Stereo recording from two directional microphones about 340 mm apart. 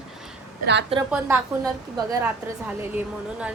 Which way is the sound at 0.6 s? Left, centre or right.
Right.